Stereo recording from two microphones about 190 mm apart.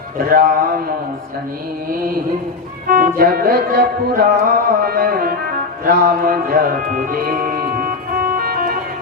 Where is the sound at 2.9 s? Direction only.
45° right (ahead or behind).